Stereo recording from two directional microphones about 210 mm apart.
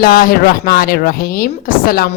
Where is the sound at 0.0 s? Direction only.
45° left (ahead or behind).